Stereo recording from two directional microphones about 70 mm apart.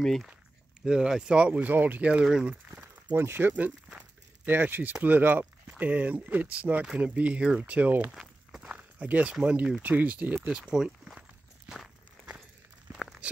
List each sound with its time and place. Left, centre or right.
0.0 s speech: centre
0.8 s speech: centre
2.5 s a sound: right
3.2 s speech: right
8.1 s walk: centre
9.0 s speech: centre
10.4 s speech: centre
12.9 s a sound: centre